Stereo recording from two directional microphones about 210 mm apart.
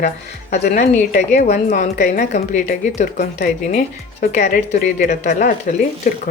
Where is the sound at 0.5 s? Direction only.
35° left (ahead or behind).